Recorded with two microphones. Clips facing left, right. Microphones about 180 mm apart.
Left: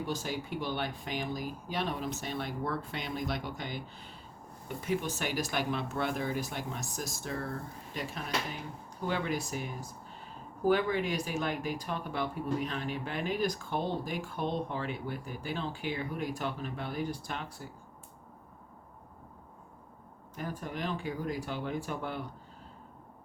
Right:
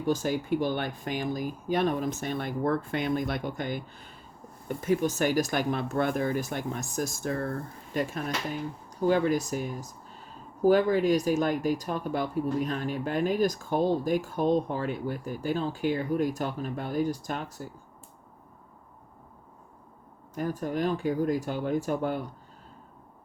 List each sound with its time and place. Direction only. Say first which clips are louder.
0.0 s speech: right 8 dB; 45° right (ahead or behind)
10.7 s speech: right 7 dB; 40° right (ahead or behind)
20.3 s speech: right 8 dB; 45° right (ahead or behind)